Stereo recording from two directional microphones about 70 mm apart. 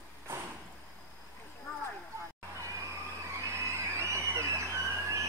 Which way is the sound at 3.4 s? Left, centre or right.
Right.